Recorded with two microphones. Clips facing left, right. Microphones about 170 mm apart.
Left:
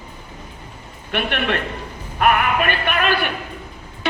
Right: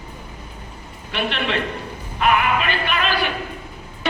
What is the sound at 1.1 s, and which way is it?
A man's voice, 55° left (ahead or behind).